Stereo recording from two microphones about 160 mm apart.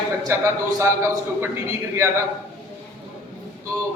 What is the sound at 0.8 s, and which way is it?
Speech, 20° right (ahead or behind).